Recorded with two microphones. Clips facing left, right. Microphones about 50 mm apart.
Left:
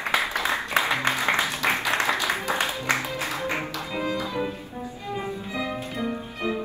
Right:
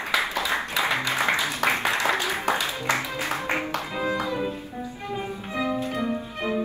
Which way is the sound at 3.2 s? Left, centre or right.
Right.